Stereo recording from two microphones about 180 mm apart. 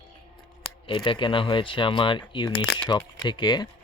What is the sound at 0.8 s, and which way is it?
Speech, 30° left (ahead or behind).